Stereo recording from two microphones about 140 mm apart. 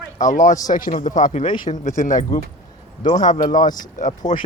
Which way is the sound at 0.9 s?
65° left (ahead or behind).